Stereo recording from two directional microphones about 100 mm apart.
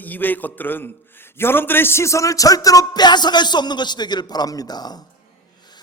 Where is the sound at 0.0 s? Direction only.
20° left (ahead or behind); by 4.9 s 45° left (ahead or behind).